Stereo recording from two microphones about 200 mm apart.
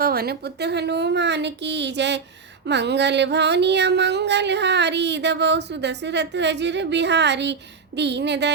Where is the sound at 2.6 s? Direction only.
60° right (ahead or behind).